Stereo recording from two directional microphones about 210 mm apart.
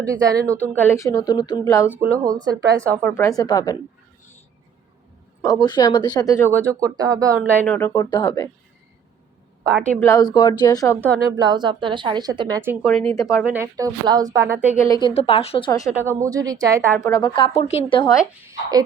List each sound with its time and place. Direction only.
0.0 s a woman's voice: 15° right (ahead or behind)
0.7 s a woman's voice: 10° left (ahead or behind)
2.0 s a woman's voice: 15° right (ahead or behind)
3.0 s a woman's voice: 10° left (ahead or behind)
5.4 s a woman's voice: 15° left (ahead or behind)
6.5 s a woman's voice: 15° right (ahead or behind)
7.6 s a woman's voice: 10° left (ahead or behind)
9.9 s a woman's voice: 10° left (ahead or behind)
11.3 s a woman's voice: 20° right (ahead or behind)
13.1 s a woman's voice: centre (ahead or behind)
15.0 s speech: 30° left (ahead or behind)
16.0 s a woman's voice: 15° right (ahead or behind)
17.0 s speech: 15° left (ahead or behind)